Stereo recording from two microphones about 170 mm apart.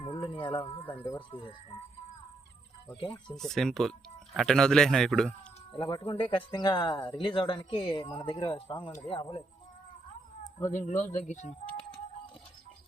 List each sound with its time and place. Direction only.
0.0 s a sound: 30° left (ahead or behind)
1.0 s speech: 25° left (ahead or behind)
3.0 s speech: 30° left (ahead or behind)
3.3 s a man's voice: 5° left (ahead or behind)
5.8 s speech: 25° left (ahead or behind)
10.7 s speech: 45° left (ahead or behind)